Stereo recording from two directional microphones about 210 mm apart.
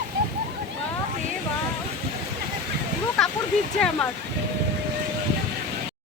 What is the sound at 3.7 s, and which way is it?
Speech, 5° left (ahead or behind).